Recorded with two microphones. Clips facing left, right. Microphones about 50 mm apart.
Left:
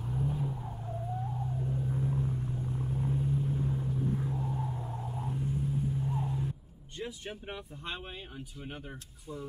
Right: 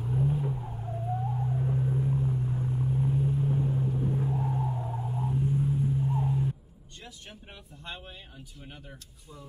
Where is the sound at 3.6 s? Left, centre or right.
Centre.